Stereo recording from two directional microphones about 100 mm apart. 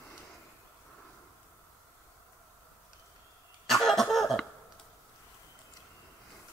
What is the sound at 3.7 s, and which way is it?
Cough, centre (ahead or behind).